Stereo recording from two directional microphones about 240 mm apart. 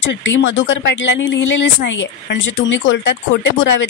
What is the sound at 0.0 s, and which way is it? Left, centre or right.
Speech, left.